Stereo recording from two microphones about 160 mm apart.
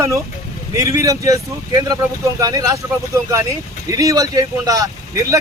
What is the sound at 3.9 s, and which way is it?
Speech, 20° right (ahead or behind).